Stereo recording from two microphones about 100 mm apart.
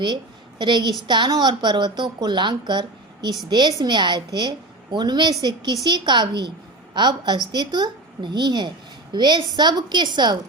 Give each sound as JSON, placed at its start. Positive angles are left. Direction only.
{"t": 0.6, "sound": "a woman's voice", "side_deg": -50}